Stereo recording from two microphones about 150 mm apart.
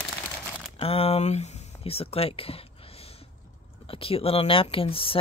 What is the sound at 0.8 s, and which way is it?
Speech, 40° left (ahead or behind).